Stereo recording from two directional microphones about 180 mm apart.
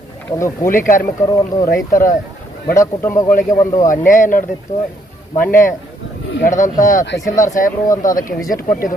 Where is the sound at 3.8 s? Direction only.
45° left (ahead or behind).